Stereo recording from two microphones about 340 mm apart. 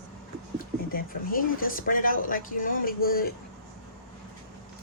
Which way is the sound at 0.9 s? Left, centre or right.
Left.